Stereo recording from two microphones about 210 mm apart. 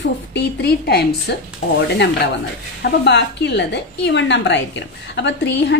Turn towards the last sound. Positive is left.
turn(degrees=55)  # may be behind; listen again after turning